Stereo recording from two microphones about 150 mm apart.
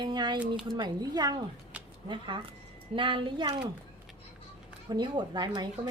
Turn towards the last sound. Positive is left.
turn(degrees=-30)  # may be behind; listen again after turning